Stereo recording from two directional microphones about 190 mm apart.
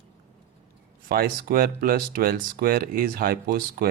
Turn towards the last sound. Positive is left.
turn(degrees=-50)  # may be behind; listen again after turning